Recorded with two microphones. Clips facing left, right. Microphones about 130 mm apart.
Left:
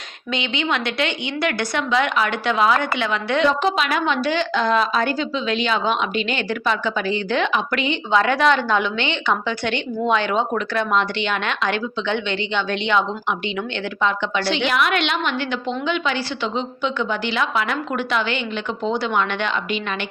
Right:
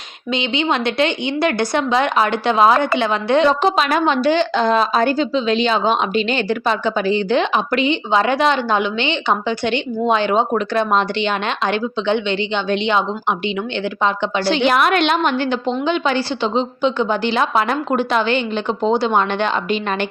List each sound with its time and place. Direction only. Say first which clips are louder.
0.3 s a woman's voice: right 4 dB; 30° right (ahead or behind)